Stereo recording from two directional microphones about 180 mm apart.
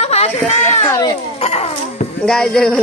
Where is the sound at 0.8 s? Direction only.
15° left (ahead or behind).